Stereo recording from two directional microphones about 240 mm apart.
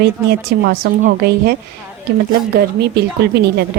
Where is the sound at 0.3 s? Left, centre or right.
Right.